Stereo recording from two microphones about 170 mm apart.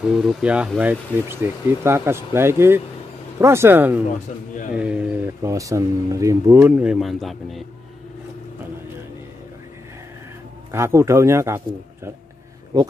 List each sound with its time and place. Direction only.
0.0 s speech: 5° right (ahead or behind)
10.7 s speech: 15° right (ahead or behind)